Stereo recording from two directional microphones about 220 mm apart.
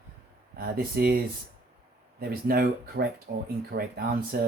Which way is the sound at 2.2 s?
45° right (ahead or behind).